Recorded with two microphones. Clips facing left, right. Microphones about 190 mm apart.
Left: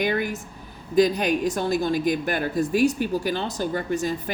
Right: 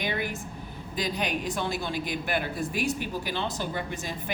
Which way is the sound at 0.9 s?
45° left (ahead or behind).